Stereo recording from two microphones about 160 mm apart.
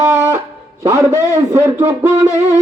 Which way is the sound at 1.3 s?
15° right (ahead or behind).